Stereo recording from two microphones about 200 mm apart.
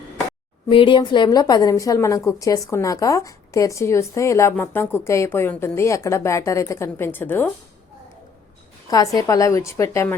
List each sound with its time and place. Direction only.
0.7 s a woman's voice: 25° left (ahead or behind)
8.9 s a woman's voice: 20° left (ahead or behind)